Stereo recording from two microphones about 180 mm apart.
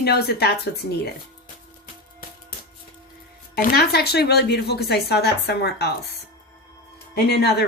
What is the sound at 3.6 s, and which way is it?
Speech, 55° left (ahead or behind).